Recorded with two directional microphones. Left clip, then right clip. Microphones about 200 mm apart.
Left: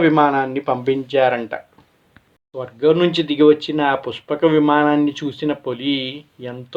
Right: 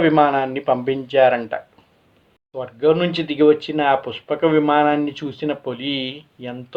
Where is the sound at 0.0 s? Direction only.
25° left (ahead or behind).